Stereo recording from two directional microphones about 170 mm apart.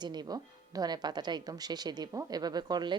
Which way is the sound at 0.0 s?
25° right (ahead or behind).